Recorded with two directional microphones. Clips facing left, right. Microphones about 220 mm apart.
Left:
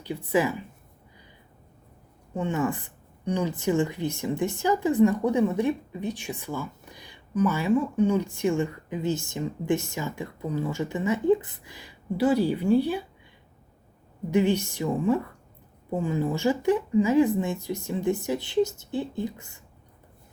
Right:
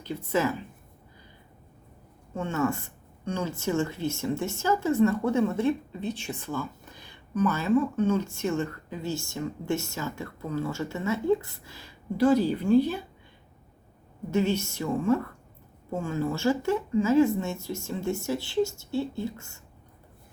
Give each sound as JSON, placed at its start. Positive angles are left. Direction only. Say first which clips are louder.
{"t": 0.0, "sound": "speech", "louder": "left 2 dB", "side_deg": 15}
{"t": 2.3, "sound": "speech", "louder": "left 1 dB", "side_deg": 15}
{"t": 14.3, "sound": "speech", "louder": "left 3 dB", "side_deg": 15}